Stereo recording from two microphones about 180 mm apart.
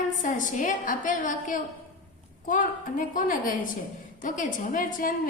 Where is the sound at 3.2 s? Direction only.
50° left (ahead or behind).